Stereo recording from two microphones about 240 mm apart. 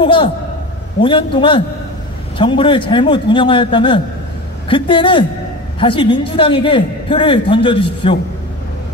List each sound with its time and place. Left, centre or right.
0.0 s a man's voice: centre